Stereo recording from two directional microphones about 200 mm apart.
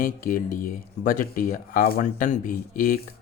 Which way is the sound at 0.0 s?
45° left (ahead or behind).